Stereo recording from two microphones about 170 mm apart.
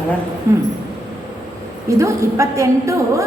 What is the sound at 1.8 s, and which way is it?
A woman's voice, 15° right (ahead or behind).